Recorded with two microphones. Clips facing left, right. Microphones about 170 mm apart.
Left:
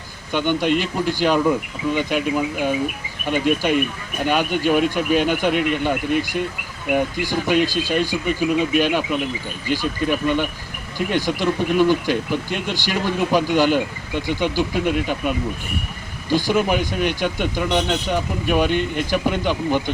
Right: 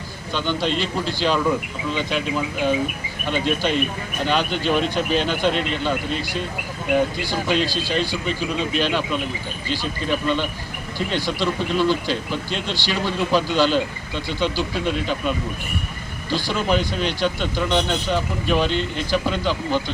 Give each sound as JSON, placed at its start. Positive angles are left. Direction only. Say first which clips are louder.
{"t": 0.3, "sound": "speech", "louder": "left 4 dB", "side_deg": 15}
{"t": 16.3, "sound": "speech", "louder": "left 3 dB", "side_deg": 15}